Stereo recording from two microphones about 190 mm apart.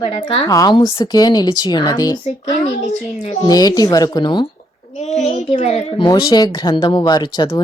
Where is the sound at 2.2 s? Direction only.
40° left (ahead or behind).